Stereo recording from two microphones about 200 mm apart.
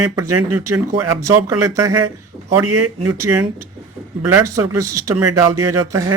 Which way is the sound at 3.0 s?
15° right (ahead or behind).